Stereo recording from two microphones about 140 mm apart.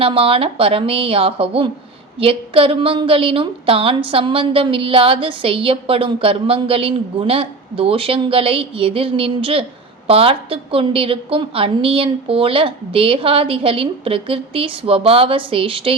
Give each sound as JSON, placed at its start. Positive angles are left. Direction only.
{"t": 0.0, "sound": "a woman's voice", "side_deg": -40}